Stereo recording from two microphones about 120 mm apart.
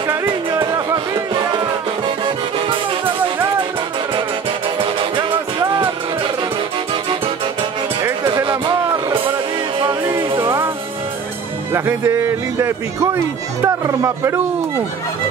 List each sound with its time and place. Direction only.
0.1 s music: 20° right (ahead or behind)
0.9 s music: 40° right (ahead or behind)
8.5 s a sound: 45° right (ahead or behind)
9.8 s music: 40° right (ahead or behind)
11.7 s speech: 20° right (ahead or behind)